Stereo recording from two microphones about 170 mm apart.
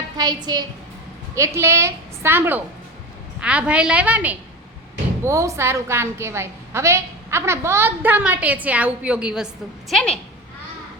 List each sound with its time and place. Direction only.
0.2 s a woman's voice: 20° right (ahead or behind)
1.4 s a woman's voice: 15° right (ahead or behind); by 10.2 s 5° left (ahead or behind)